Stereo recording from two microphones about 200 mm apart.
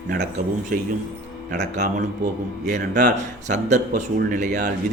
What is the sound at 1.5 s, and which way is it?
Speech, 40° right (ahead or behind).